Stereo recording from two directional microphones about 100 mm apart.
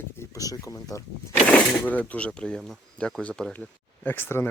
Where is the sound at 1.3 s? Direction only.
15° left (ahead or behind).